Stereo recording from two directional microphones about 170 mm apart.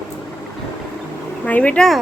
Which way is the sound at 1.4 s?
10° left (ahead or behind).